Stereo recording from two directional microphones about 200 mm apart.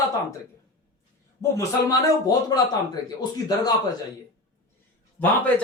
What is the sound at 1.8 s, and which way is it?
Speech, 20° left (ahead or behind).